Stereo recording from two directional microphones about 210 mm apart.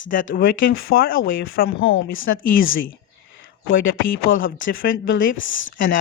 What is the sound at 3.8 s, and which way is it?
Speech, 65° left (ahead or behind).